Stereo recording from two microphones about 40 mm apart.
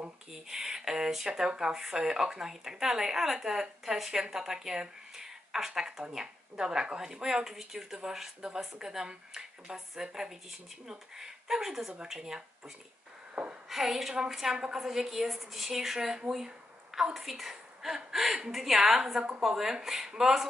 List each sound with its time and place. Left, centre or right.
0.3 s speech: centre
13.3 s a sound: right
13.7 s speech: centre